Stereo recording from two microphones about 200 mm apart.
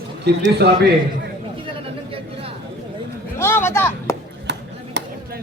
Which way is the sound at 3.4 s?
10° left (ahead or behind).